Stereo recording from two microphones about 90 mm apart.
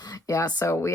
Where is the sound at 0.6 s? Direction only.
30° left (ahead or behind).